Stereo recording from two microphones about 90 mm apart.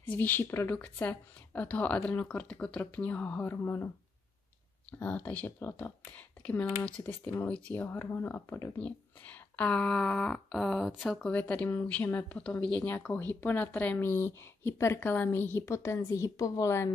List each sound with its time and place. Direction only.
0.1 s a woman's voice: 20° left (ahead or behind)
4.9 s speech: 20° left (ahead or behind)
8.7 s a woman's voice: 15° left (ahead or behind)
11.2 s a woman's voice: 15° left (ahead or behind); by 16.9 s 35° left (ahead or behind)